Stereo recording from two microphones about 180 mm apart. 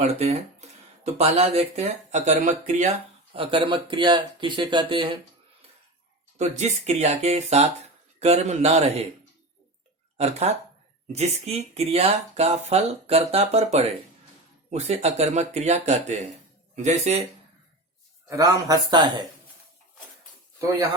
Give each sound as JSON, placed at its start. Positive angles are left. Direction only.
{"t": 0.0, "sound": "speech", "side_deg": -35}
{"t": 3.3, "sound": "speech", "side_deg": -30}
{"t": 6.4, "sound": "speech", "side_deg": -35}
{"t": 10.2, "sound": "speech", "side_deg": -35}
{"t": 18.3, "sound": "speech", "side_deg": -20}
{"t": 20.6, "sound": "speech", "side_deg": -20}